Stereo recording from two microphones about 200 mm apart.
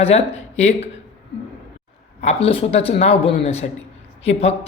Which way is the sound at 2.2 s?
30° left (ahead or behind).